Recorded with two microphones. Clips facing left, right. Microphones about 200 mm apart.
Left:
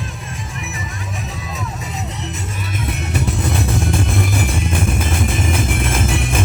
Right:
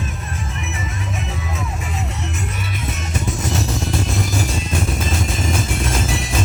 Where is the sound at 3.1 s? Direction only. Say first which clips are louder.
Left 2 dB; 55° left (ahead or behind).